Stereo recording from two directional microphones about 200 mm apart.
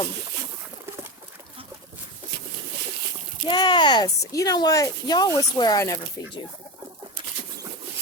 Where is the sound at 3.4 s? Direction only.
20° left (ahead or behind).